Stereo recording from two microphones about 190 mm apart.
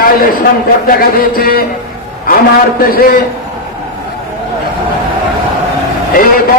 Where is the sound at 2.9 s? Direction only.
50° left (ahead or behind).